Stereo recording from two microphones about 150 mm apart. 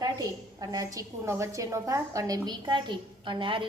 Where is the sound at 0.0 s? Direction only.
25° right (ahead or behind).